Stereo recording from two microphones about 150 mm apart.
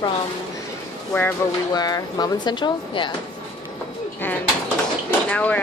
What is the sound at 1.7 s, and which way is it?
Speech, 25° left (ahead or behind).